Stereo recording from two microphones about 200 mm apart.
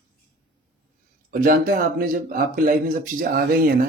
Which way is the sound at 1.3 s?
45° right (ahead or behind).